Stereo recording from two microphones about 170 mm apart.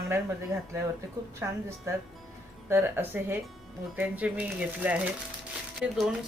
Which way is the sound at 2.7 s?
10° right (ahead or behind).